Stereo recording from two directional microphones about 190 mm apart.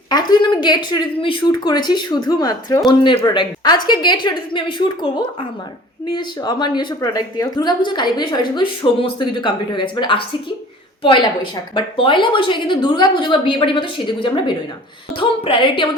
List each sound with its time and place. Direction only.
0.1 s a woman's voice: 20° left (ahead or behind)
11.7 s a woman's voice: 25° left (ahead or behind)